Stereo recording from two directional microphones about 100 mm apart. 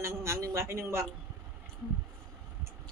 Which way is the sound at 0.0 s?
25° right (ahead or behind).